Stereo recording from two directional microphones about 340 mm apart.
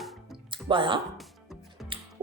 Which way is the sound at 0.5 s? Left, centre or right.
Centre.